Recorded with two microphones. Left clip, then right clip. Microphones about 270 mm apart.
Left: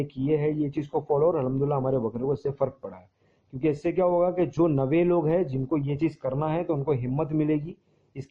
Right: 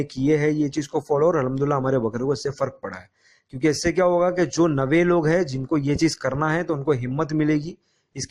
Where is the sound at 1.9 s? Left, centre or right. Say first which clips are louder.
Right 4 dB; right.